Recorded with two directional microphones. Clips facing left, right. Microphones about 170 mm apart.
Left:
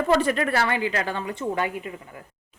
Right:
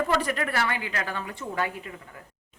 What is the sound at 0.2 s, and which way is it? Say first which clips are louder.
A woman's voice: left 5 dB; 30° left (ahead or behind).